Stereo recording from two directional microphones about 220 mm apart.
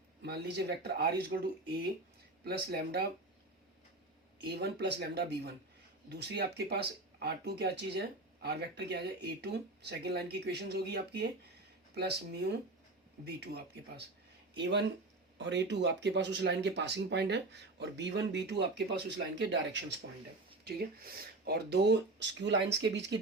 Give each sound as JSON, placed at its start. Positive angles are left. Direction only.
{"t": 0.2, "sound": "speech", "side_deg": -45}
{"t": 2.4, "sound": "speech", "side_deg": -45}
{"t": 4.4, "sound": "speech", "side_deg": -50}